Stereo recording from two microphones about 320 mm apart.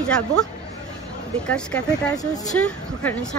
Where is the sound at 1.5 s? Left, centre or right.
Centre.